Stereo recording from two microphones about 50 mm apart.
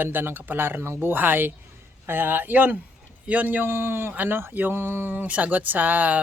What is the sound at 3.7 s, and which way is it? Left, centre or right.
Speech, right.